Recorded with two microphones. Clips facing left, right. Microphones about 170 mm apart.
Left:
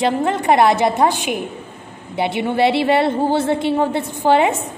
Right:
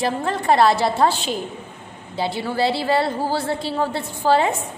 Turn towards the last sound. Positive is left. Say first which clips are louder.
# left 3 dB
turn(degrees=20)  # may be behind; listen again after turning